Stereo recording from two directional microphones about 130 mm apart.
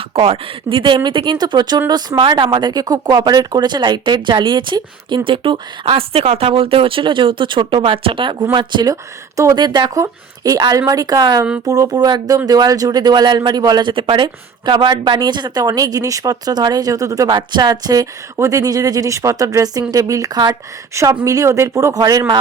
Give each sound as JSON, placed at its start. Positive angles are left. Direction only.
{"t": 0.1, "sound": "speech", "side_deg": -50}